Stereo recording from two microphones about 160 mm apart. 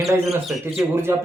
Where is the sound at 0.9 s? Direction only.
15° right (ahead or behind).